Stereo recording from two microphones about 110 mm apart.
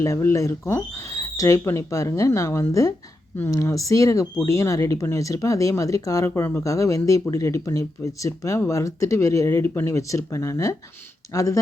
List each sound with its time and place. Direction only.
0.0 s speech: 25° left (ahead or behind)